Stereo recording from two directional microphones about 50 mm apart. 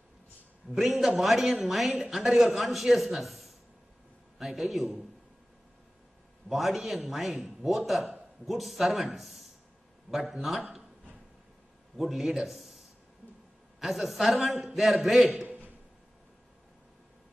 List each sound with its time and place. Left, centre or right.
0.7 s a man's voice: centre
6.5 s a man's voice: centre
12.0 s a man's voice: centre
15.4 s a sound: right